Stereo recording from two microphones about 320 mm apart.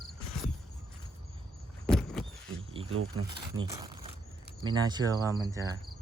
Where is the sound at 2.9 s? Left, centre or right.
Right.